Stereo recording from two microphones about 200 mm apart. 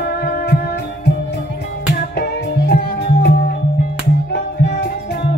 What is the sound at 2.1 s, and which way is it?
Music, 55° left (ahead or behind).